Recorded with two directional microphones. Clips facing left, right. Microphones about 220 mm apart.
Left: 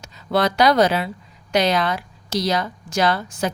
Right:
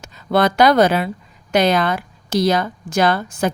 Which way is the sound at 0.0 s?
55° right (ahead or behind).